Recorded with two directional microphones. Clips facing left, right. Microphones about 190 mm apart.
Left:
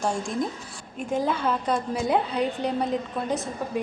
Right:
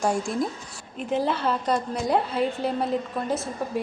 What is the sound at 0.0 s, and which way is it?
A woman's voice, 5° right (ahead or behind).